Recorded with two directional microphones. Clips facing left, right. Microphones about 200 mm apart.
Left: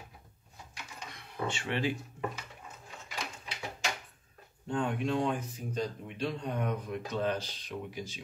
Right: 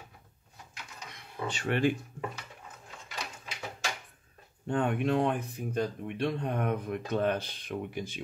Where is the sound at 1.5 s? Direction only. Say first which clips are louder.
Right 6 dB; 45° right (ahead or behind).